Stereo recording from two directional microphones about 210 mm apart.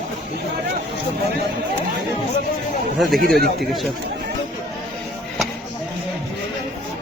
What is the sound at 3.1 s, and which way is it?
Speech, 45° right (ahead or behind).